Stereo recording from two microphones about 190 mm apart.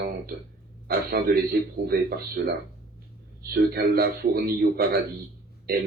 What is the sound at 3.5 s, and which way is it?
Speech, 55° right (ahead or behind).